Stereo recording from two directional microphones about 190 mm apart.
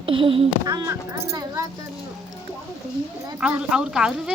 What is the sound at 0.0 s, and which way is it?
Speech, 25° right (ahead or behind).